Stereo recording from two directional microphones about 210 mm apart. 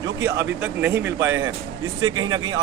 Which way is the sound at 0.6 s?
10° right (ahead or behind).